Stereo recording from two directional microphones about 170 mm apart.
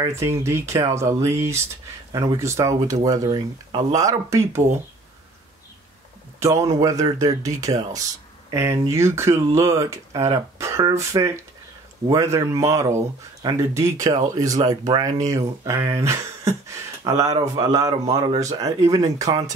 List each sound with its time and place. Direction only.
0.0 s speech: 15° right (ahead or behind)
6.4 s speech: 15° right (ahead or behind)